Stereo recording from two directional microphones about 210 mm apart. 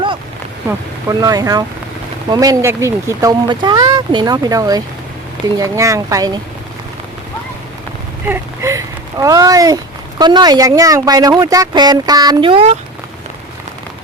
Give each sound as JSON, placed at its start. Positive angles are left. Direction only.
{"t": 1.2, "sound": "speech", "side_deg": -20}
{"t": 8.3, "sound": "speech", "side_deg": -15}